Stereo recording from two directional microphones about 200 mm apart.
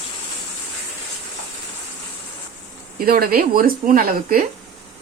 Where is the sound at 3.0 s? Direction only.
50° right (ahead or behind).